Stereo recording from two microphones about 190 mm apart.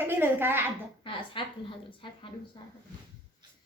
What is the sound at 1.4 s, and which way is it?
Speech, 25° left (ahead or behind).